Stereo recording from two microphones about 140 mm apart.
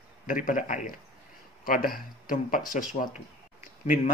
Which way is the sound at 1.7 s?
90° left.